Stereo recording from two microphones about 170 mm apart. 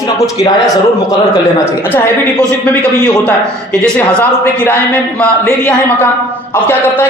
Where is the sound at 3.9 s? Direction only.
10° left (ahead or behind).